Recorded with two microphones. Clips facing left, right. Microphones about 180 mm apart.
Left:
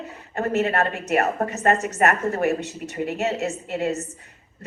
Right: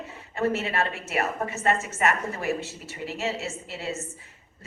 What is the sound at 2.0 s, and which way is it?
Speech, 50° left (ahead or behind).